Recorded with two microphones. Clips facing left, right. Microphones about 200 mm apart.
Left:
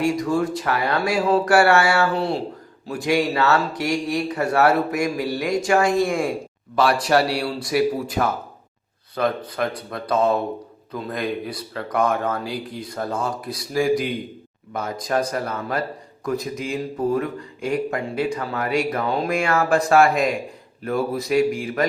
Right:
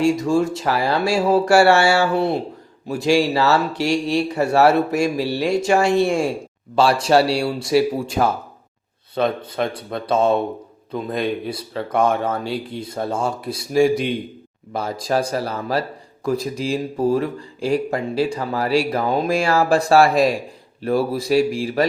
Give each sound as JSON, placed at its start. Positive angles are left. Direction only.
{"t": 0.0, "sound": "speech", "side_deg": -25}